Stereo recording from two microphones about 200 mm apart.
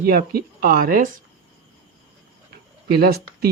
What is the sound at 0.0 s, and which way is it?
Speech, 50° right (ahead or behind).